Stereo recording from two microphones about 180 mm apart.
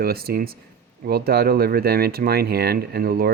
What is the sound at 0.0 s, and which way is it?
Speech, 60° right (ahead or behind).